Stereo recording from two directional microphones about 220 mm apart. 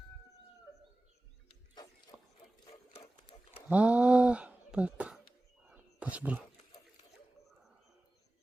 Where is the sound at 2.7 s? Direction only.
25° left (ahead or behind).